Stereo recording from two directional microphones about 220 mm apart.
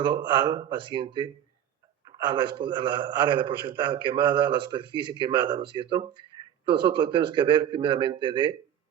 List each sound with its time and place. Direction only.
0.3 s a man's voice: 20° right (ahead or behind)